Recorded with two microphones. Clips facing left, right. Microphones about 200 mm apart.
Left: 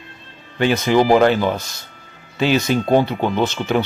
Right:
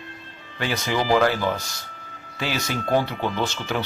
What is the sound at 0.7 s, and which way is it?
Speech, 60° left (ahead or behind).